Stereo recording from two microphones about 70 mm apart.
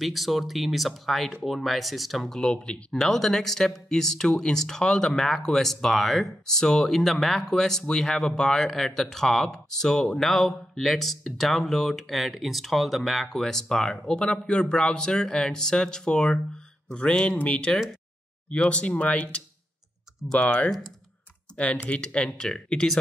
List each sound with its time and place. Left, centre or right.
0.0 s speech: centre